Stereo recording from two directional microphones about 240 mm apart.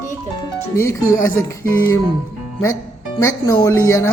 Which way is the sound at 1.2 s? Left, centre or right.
Centre.